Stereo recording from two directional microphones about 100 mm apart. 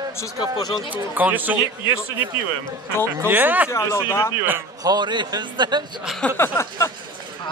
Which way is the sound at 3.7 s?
25° left (ahead or behind).